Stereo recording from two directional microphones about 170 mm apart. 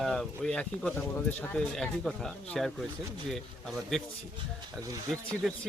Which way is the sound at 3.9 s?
Centre (ahead or behind).